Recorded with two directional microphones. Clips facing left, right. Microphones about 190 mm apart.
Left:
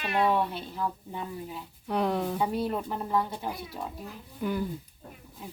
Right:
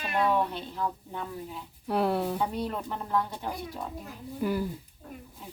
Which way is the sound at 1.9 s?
5° right (ahead or behind).